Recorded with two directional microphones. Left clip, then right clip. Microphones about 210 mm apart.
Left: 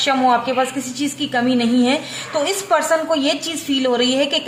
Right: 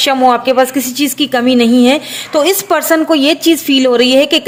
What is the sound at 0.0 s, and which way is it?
A woman's voice, 50° right (ahead or behind).